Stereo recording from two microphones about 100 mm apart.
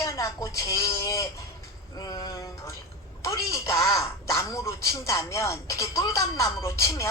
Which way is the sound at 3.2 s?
35° left (ahead or behind).